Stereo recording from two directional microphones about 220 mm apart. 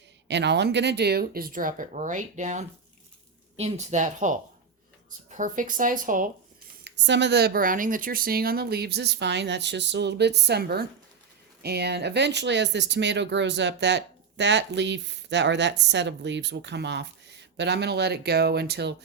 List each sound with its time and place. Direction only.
0.3 s speech: 50° right (ahead or behind)
6.8 s speech: 50° right (ahead or behind)